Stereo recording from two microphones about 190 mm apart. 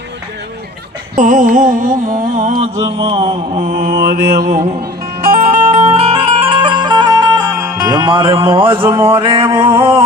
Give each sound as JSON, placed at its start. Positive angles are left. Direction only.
{"t": 1.1, "sound": "music", "side_deg": -40}
{"t": 2.3, "sound": "mantra", "side_deg": -35}
{"t": 5.2, "sound": "music", "side_deg": -35}